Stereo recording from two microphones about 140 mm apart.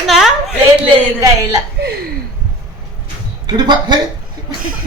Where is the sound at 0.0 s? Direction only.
Centre (ahead or behind).